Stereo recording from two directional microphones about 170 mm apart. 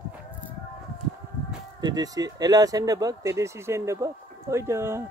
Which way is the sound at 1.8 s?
20° right (ahead or behind).